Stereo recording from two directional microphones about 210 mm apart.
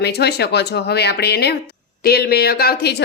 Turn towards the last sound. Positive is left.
turn(degrees=50)  # may be behind; listen again after turning